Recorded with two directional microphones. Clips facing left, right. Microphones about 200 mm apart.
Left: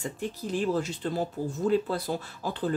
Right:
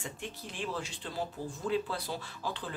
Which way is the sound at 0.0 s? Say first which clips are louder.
Left 8 dB; 40° left (ahead or behind).